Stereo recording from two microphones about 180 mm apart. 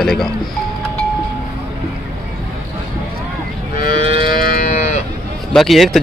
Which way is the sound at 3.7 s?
50° left (ahead or behind).